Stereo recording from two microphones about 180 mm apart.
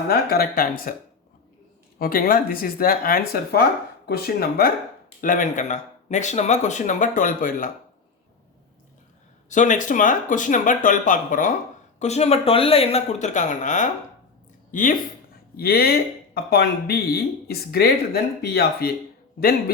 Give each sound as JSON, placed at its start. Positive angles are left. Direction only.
{"t": 0.1, "sound": "speech", "side_deg": 60}
{"t": 2.0, "sound": "speech", "side_deg": 50}
{"t": 9.5, "sound": "speech", "side_deg": 45}
{"t": 11.9, "sound": "speech", "side_deg": 35}
{"t": 15.5, "sound": "speech", "side_deg": 60}